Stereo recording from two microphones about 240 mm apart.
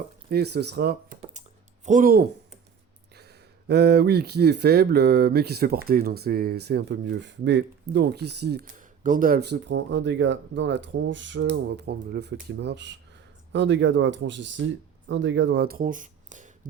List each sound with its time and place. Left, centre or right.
0.3 s computer keyboard: right
3.2 s speech: right